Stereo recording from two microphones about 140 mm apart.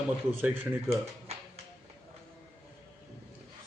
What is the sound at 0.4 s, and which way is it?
Speech, 15° right (ahead or behind).